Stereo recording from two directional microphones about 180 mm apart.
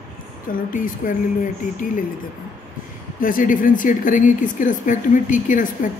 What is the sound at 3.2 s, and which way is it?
Speech, 50° left (ahead or behind).